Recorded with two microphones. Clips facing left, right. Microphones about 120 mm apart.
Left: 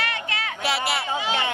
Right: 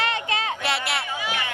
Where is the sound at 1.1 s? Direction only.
25° left (ahead or behind).